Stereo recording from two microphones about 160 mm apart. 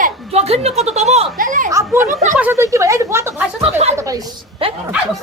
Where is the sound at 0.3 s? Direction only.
40° right (ahead or behind).